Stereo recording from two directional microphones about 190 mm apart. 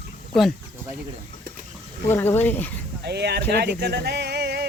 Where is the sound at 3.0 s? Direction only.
60° right (ahead or behind).